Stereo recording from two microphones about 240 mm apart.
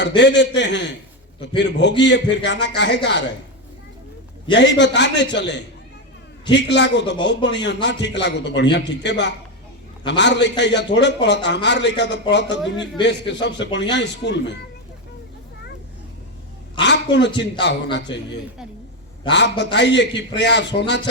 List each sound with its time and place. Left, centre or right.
0.2 s a man's voice: left
4.5 s a man's voice: left
16.8 s a man's voice: left